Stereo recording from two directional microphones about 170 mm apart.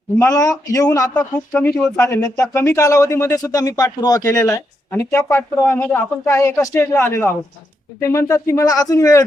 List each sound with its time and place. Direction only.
0.2 s a man's voice: 20° left (ahead or behind)